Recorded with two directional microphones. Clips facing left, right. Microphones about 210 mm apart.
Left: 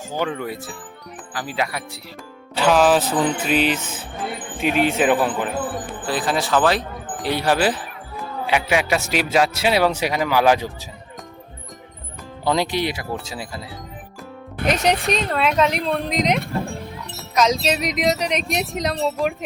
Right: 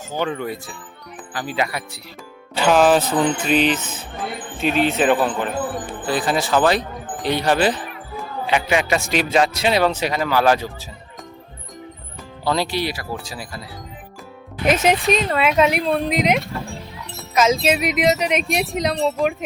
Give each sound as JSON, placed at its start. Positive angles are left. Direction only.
{"t": 0.3, "sound": "speech", "side_deg": 5}
{"t": 12.5, "sound": "speech", "side_deg": 20}
{"t": 14.7, "sound": "speech", "side_deg": -5}
{"t": 16.4, "sound": "music", "side_deg": 55}
{"t": 17.2, "sound": "speech", "side_deg": -5}